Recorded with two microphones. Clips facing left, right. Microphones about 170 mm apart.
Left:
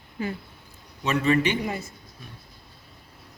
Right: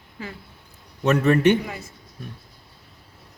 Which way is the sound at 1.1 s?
55° right (ahead or behind).